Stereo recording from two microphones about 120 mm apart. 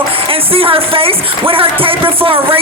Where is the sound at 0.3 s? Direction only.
50° right (ahead or behind).